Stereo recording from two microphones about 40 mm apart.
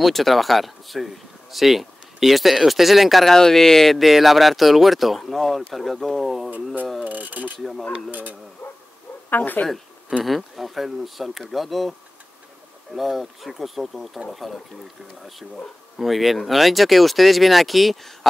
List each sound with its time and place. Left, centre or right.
0.0 s speech: centre
6.5 s speech: right
7.5 s speech: centre
8.1 s speech: right
9.6 s speech: left
10.2 s speech: centre
12.9 s speech: centre
16.0 s speech: centre